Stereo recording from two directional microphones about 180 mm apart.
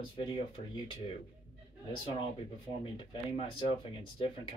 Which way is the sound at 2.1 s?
30° left (ahead or behind).